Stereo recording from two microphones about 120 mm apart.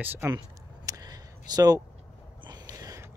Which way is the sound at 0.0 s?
15° right (ahead or behind).